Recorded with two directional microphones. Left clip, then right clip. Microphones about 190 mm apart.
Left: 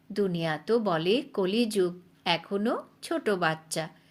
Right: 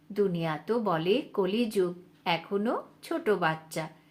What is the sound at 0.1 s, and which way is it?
A woman's voice, 45° left (ahead or behind).